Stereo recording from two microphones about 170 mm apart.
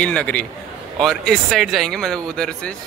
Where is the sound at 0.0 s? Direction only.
5° left (ahead or behind).